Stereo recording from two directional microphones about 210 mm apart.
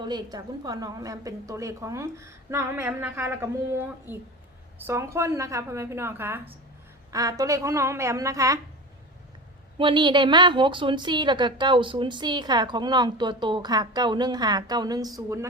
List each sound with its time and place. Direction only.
0.0 s a woman's voice: 20° right (ahead or behind)
9.7 s a woman's voice: 25° right (ahead or behind)